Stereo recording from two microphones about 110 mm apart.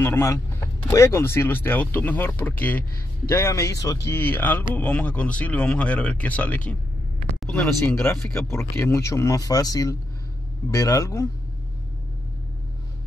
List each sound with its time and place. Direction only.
0.0 s speech: 25° left (ahead or behind)
3.3 s speech: 25° left (ahead or behind); by 8.0 s 10° left (ahead or behind)
8.0 s speech: 25° left (ahead or behind)